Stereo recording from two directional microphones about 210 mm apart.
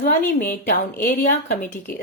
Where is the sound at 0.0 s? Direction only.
45° left (ahead or behind).